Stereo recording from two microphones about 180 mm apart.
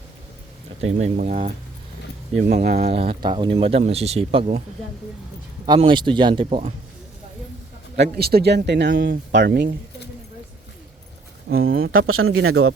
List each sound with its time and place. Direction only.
0.8 s speech: 35° right (ahead or behind)
1.1 s speech: 50° right (ahead or behind)
2.4 s speech: 55° right (ahead or behind)
2.8 s speech: 30° right (ahead or behind)
5.6 s speech: 25° right (ahead or behind)
7.9 s speech: 65° right (ahead or behind)
11.4 s speech: 90° right